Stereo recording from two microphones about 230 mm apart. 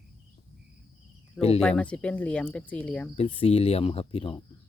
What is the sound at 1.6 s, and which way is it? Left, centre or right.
Speech, centre.